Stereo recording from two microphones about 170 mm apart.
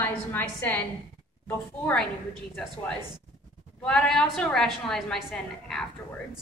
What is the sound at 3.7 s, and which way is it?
A woman's voice, 5° left (ahead or behind).